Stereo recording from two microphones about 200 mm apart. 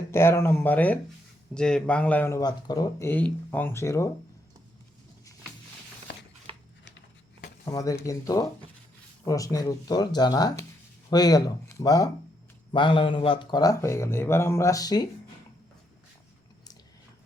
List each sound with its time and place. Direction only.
0.1 s speech: 10° left (ahead or behind)
6.5 s a sound: 30° right (ahead or behind)
7.6 s speech: 15° left (ahead or behind)